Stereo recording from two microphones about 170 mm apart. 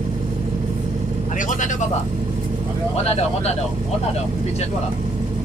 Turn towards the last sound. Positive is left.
turn(degrees=40)  # may be behind; listen again after turning